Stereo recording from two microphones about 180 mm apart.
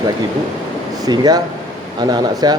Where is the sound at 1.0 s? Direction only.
20° right (ahead or behind).